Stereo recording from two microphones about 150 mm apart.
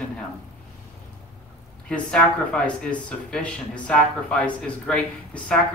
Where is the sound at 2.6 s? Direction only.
5° left (ahead or behind).